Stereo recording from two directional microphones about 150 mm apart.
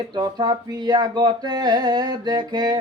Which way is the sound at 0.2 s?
30° right (ahead or behind).